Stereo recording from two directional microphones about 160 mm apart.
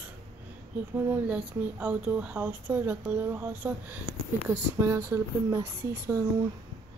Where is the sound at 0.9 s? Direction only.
10° right (ahead or behind).